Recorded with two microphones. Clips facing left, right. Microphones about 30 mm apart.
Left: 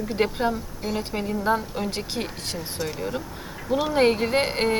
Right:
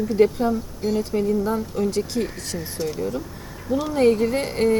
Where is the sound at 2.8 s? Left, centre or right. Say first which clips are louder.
Right 4 dB; left.